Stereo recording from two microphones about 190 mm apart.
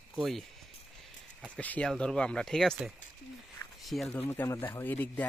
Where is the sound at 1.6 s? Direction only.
5° left (ahead or behind).